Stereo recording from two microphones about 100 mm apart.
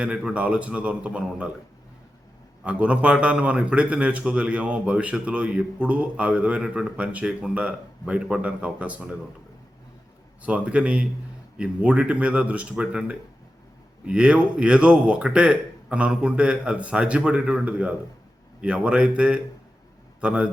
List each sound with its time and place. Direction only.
0.0 s a man's voice: 5° right (ahead or behind)
2.6 s a man's voice: 10° right (ahead or behind)
10.4 s a man's voice: 10° right (ahead or behind)